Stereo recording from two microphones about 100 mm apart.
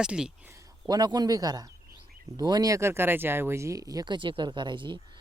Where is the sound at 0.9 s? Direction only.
45° right (ahead or behind).